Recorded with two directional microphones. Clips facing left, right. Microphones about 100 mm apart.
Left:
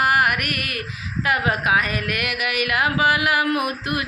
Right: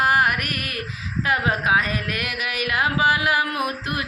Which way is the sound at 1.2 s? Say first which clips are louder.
Left 1 dB; 30° right (ahead or behind).